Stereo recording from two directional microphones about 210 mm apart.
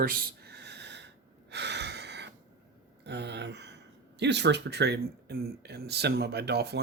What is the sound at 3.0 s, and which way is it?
Speech, 55° right (ahead or behind).